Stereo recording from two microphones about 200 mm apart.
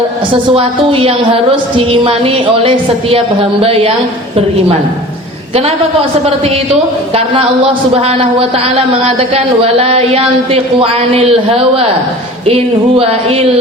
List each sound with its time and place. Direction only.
0.5 s a woman's voice: 25° right (ahead or behind)
6.2 s a woman's voice: 30° right (ahead or behind)